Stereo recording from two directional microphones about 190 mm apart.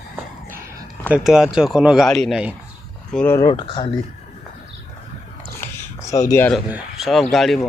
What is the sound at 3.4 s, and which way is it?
Speech, 20° left (ahead or behind).